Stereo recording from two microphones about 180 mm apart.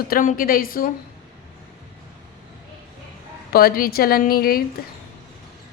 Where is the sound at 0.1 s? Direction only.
50° left (ahead or behind).